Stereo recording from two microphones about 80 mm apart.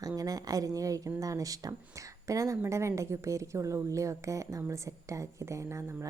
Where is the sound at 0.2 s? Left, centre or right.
Right.